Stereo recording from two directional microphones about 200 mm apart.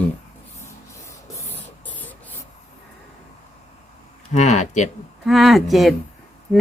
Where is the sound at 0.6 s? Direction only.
10° left (ahead or behind).